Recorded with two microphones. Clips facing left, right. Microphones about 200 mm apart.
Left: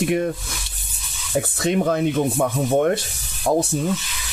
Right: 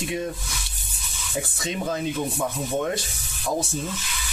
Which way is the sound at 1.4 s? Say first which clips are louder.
Left 8 dB; 60° left (ahead or behind).